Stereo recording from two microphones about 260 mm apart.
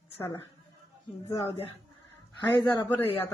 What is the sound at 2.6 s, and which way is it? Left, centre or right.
Speech, centre.